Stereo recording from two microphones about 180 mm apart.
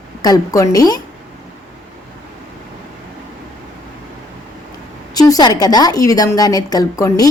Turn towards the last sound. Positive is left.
turn(degrees=20)  # may be behind; listen again after turning